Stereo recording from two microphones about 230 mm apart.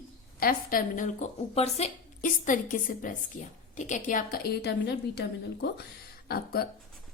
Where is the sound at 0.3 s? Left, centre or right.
Left.